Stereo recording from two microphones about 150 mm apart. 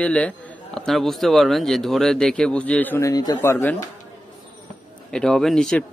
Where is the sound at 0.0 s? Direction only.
10° left (ahead or behind).